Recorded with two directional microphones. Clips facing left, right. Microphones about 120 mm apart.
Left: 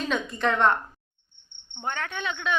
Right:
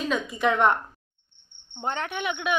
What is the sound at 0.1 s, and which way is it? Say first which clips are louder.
Speech: right 2 dB; 10° right (ahead or behind).